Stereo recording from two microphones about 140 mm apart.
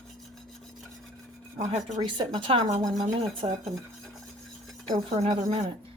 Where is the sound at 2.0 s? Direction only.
35° right (ahead or behind).